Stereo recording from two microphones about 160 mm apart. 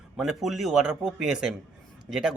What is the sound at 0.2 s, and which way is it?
Speech, centre (ahead or behind).